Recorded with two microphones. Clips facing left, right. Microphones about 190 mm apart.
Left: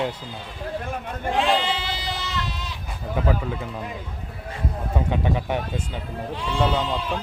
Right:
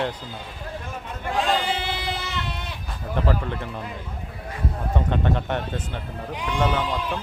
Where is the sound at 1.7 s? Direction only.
55° right (ahead or behind).